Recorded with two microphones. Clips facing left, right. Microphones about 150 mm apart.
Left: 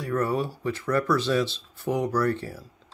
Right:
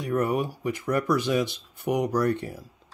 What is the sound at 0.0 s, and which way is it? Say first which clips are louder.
Speech: right 1 dB; 20° right (ahead or behind).